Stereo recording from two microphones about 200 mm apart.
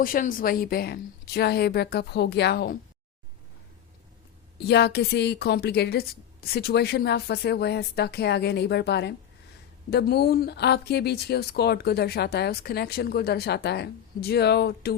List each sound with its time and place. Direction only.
0.0 s speech: 45° left (ahead or behind)
4.5 s a woman's voice: 55° left (ahead or behind)